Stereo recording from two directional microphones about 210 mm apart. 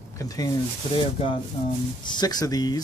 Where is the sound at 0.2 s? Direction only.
15° left (ahead or behind).